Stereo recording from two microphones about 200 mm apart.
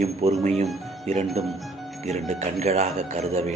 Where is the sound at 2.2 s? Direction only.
35° right (ahead or behind).